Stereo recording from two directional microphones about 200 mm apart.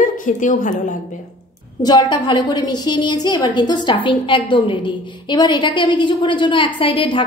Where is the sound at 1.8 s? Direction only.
20° left (ahead or behind).